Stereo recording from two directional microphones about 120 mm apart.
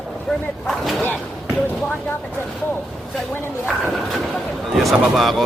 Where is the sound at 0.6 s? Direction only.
Centre (ahead or behind).